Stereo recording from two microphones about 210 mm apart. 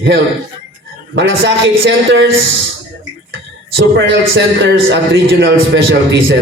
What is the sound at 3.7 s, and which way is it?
A man's voice, 55° right (ahead or behind).